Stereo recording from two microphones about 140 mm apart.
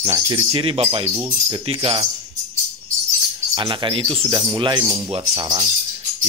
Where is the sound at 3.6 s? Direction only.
35° right (ahead or behind).